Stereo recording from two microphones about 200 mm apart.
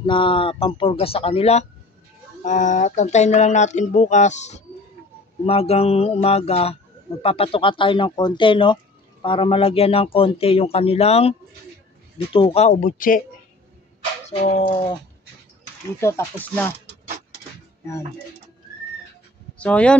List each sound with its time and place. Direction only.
0.0 s speech: 25° left (ahead or behind)
12.7 s speech: 45° left (ahead or behind)
14.3 s speech: 30° left (ahead or behind)
16.0 s speech: 15° left (ahead or behind)
19.6 s speech: 5° left (ahead or behind)